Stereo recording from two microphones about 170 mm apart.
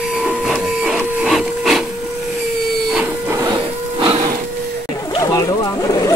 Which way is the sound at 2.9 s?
10° right (ahead or behind).